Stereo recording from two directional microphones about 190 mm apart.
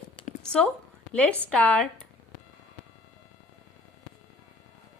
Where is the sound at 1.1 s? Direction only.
5° left (ahead or behind).